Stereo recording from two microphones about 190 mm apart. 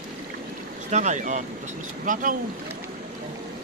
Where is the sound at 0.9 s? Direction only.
40° right (ahead or behind).